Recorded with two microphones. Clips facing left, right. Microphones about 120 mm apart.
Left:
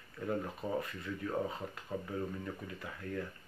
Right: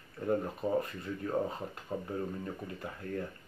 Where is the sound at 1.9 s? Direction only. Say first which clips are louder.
Right 2 dB; 25° right (ahead or behind).